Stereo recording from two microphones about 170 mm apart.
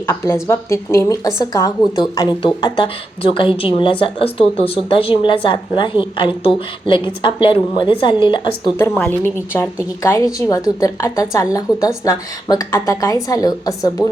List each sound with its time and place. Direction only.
0.4 s a woman's voice: 15° left (ahead or behind)
8.8 s a woman's voice: 15° left (ahead or behind)